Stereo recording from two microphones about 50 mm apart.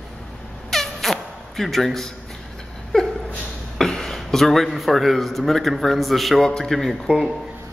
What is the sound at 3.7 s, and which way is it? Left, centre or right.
A man's voice, centre.